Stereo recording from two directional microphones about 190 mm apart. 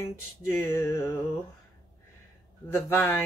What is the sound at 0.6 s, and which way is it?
Speech, 15° left (ahead or behind).